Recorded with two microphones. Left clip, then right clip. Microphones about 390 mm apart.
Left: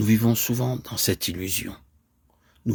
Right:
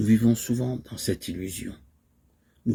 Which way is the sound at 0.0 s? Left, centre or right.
Left.